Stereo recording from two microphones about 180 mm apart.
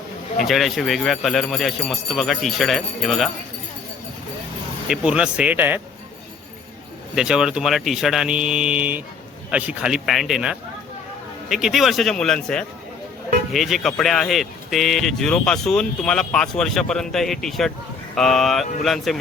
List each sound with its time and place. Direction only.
0.4 s speech: centre (ahead or behind)
4.9 s speech: 5° right (ahead or behind)
7.2 s speech: 5° right (ahead or behind)